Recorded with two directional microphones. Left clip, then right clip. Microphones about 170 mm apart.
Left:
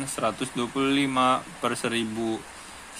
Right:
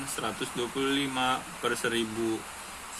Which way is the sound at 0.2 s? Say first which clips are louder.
Left 5 dB; 70° left (ahead or behind).